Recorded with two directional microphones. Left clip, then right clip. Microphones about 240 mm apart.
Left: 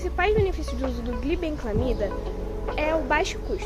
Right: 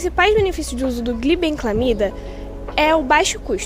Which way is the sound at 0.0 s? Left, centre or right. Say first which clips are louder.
Right 8 dB; right.